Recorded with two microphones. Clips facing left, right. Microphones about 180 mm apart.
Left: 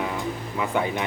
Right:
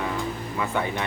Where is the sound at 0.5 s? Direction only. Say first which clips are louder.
Left 2 dB; 15° left (ahead or behind).